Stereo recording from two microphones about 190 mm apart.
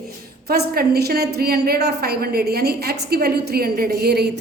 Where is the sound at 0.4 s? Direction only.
55° right (ahead or behind).